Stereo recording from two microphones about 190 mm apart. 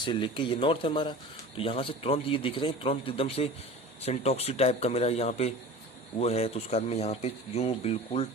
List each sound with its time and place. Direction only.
0.0 s speech: 25° left (ahead or behind)